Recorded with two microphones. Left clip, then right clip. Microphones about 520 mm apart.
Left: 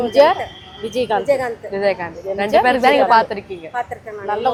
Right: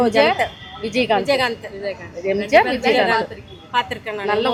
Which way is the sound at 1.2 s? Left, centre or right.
Right.